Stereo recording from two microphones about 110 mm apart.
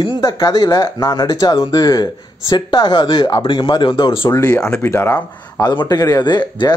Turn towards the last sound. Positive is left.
turn(degrees=40)  # may be behind; listen again after turning